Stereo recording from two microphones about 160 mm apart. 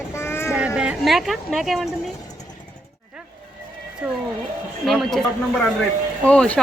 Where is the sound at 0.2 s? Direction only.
15° left (ahead or behind).